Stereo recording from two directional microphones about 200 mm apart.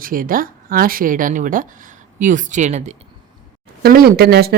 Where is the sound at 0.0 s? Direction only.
45° right (ahead or behind).